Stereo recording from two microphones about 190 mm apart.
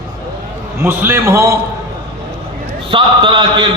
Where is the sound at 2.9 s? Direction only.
25° right (ahead or behind).